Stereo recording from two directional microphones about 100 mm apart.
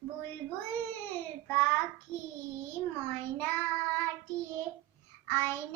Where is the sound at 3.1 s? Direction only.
20° left (ahead or behind).